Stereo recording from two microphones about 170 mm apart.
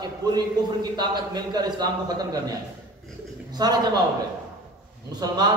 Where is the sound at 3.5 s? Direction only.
25° right (ahead or behind).